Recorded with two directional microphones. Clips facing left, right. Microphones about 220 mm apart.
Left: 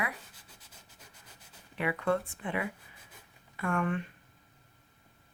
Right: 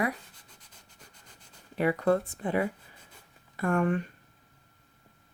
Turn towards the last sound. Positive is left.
turn(degrees=-40)  # may be behind; listen again after turning